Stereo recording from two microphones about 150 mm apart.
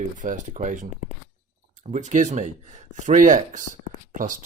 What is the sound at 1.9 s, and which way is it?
Speech, 55° right (ahead or behind).